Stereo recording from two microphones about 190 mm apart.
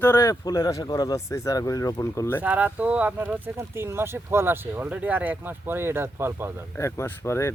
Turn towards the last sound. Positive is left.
turn(degrees=15)  # may be behind; listen again after turning